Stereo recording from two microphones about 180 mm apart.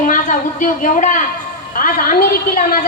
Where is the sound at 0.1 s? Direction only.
45° left (ahead or behind).